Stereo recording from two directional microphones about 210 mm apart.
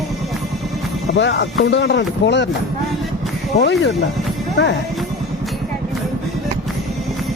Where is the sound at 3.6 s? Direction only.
55° left (ahead or behind).